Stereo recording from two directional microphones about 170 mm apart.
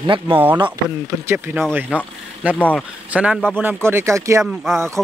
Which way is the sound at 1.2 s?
15° right (ahead or behind).